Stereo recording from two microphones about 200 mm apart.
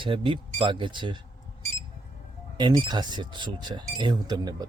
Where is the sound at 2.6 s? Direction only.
20° right (ahead or behind).